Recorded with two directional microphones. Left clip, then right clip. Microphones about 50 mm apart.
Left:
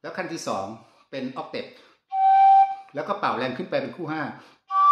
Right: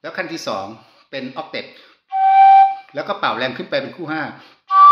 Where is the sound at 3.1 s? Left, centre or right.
Left.